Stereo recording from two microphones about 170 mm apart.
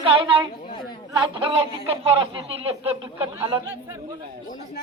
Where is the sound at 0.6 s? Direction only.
30° left (ahead or behind).